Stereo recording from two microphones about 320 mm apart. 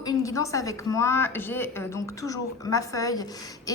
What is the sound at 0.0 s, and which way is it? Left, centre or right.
A woman's voice, centre.